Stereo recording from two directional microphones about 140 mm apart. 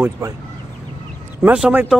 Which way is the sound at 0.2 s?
20° right (ahead or behind).